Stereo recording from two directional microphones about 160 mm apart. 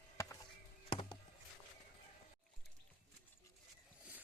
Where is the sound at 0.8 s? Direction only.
30° left (ahead or behind).